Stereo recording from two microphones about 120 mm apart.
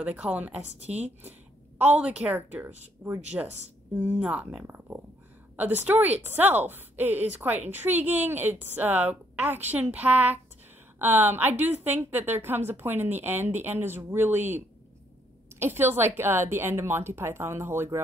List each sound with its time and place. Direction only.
0.0 s a woman's voice: 10° right (ahead or behind)
3.0 s speech: 35° right (ahead or behind)
3.3 s a woman's voice: 15° right (ahead or behind)
15.6 s a woman's voice: 20° right (ahead or behind)